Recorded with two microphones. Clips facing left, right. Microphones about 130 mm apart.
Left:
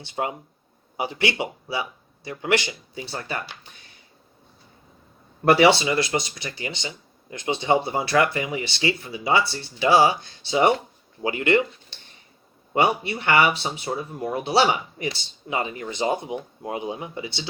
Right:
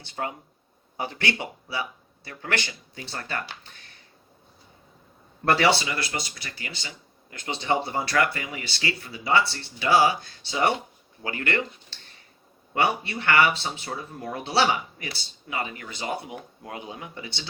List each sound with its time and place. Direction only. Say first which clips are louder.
0.0 s speech: left 4 dB; 20° left (ahead or behind)
5.5 s speech: left 5 dB; 15° left (ahead or behind)